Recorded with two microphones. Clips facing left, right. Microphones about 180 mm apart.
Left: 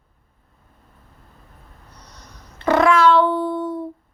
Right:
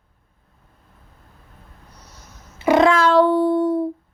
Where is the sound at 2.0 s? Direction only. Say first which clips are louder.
Left 2 dB; 5° right (ahead or behind).